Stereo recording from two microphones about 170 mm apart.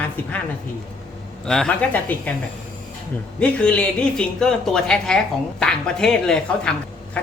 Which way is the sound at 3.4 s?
5° left (ahead or behind).